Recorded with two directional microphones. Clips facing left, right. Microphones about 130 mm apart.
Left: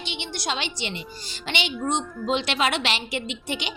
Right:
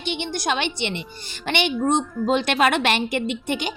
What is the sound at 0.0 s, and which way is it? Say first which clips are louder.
A woman's voice: right 6 dB; 50° right (ahead or behind).